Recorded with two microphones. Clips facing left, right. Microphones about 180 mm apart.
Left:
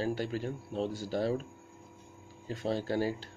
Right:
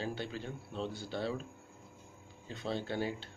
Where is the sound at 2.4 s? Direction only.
40° left (ahead or behind).